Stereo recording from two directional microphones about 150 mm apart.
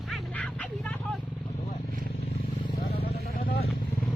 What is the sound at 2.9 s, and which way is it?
Vehicle, 85° left.